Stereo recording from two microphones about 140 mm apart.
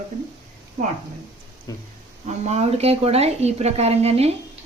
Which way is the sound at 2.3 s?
50° right (ahead or behind).